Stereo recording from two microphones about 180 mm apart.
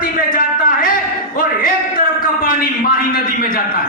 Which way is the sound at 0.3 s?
50° left (ahead or behind).